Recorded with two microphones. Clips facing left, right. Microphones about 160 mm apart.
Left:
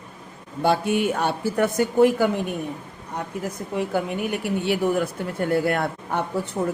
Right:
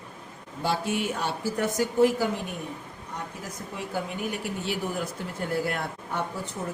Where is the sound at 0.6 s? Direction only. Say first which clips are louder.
Left 7 dB; 60° left (ahead or behind).